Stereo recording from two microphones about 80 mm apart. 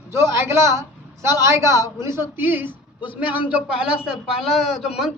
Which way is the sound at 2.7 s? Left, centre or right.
Left.